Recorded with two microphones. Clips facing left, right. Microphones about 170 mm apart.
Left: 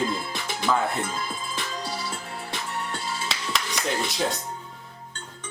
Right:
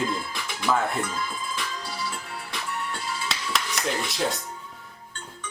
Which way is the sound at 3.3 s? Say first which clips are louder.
Right 2 dB; centre (ahead or behind).